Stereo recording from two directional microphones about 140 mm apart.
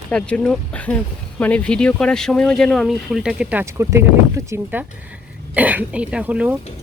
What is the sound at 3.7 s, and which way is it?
Speech, 20° right (ahead or behind).